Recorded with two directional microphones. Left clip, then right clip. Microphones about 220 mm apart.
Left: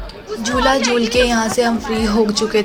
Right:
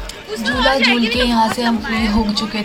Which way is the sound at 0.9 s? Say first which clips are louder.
Left 1 dB; 15° left (ahead or behind).